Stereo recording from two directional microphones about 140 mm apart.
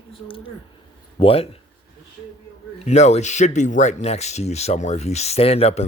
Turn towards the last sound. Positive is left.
turn(degrees=50)  # may be behind; listen again after turning